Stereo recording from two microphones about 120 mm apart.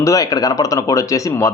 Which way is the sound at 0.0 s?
30° left (ahead or behind).